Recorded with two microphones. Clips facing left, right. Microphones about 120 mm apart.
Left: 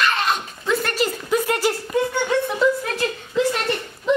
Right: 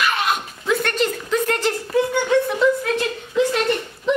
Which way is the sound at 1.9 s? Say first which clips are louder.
Right 5 dB; centre (ahead or behind).